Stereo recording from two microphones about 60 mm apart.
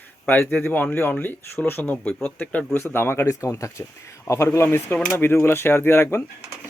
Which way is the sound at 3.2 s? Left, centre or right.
Left.